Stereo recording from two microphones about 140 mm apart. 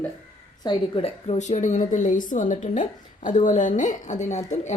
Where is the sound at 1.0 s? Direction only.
50° left (ahead or behind).